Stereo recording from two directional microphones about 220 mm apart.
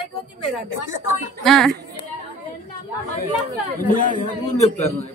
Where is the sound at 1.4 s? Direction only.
Centre (ahead or behind).